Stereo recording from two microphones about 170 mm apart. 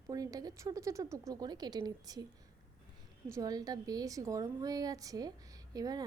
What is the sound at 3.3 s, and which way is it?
A woman's voice, 20° right (ahead or behind).